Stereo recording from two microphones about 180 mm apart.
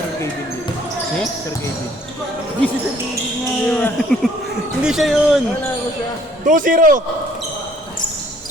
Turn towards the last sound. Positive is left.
turn(degrees=-50)  # may be behind; listen again after turning